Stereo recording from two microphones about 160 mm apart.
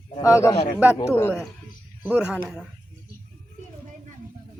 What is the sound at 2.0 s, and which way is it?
Speech, 10° right (ahead or behind).